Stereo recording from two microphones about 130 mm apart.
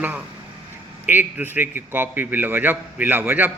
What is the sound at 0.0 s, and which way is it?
A man's voice, 10° right (ahead or behind).